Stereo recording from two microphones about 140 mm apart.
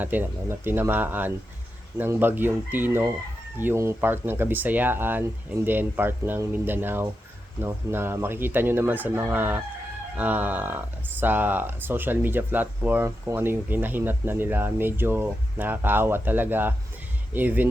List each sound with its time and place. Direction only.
0.0 s speech: 15° right (ahead or behind)